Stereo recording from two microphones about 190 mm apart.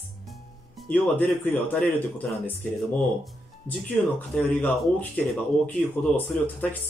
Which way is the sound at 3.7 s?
10° left (ahead or behind).